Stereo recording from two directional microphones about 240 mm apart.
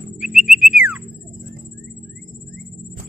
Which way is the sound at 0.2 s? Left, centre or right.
Centre.